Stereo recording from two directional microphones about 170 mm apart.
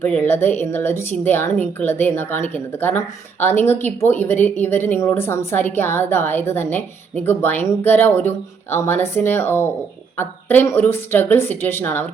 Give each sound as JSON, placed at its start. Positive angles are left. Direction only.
{"t": 0.0, "sound": "speech", "side_deg": 10}